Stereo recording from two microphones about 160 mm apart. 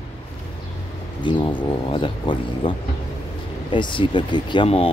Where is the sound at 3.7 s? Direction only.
30° left (ahead or behind).